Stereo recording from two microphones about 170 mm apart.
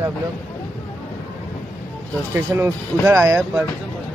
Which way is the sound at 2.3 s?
15° right (ahead or behind).